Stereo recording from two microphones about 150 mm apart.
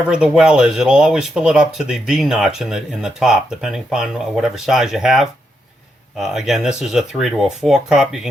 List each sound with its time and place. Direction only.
0.1 s speech: 5° right (ahead or behind)